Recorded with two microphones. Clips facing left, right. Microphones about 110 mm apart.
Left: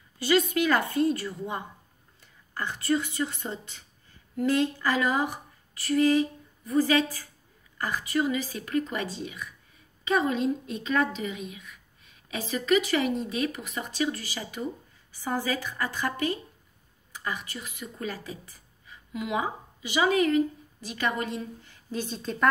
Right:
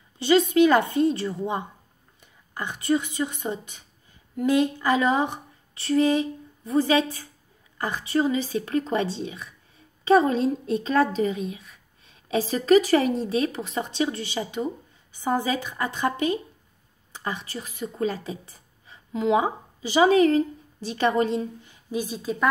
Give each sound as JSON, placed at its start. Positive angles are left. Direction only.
{"t": 0.2, "sound": "a woman's voice", "side_deg": -25}
{"t": 21.9, "sound": "a woman's voice", "side_deg": -10}